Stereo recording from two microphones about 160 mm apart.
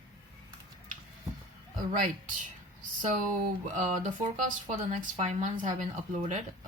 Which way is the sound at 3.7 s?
50° right (ahead or behind).